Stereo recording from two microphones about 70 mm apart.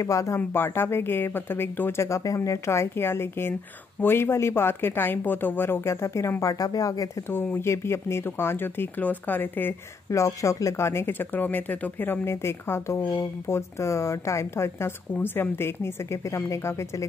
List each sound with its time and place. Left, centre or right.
0.0 s speech: left
0.5 s speech: left
6.4 s speech: left
7.5 s speech: left
10.0 s speech: left